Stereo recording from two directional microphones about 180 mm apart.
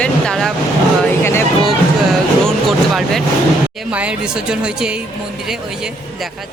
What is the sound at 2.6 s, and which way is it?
Vehicle, centre (ahead or behind).